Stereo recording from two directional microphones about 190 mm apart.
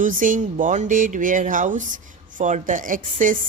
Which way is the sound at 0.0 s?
45° right (ahead or behind).